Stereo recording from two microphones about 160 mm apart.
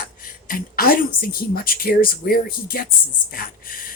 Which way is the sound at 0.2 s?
65° left (ahead or behind).